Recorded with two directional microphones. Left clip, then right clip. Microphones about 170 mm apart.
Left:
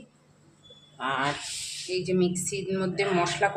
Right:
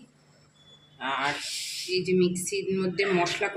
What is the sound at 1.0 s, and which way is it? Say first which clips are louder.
A woman's voice: even; 15° left (ahead or behind).